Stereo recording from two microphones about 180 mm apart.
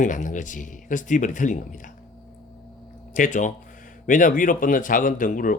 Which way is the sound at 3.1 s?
45° left (ahead or behind).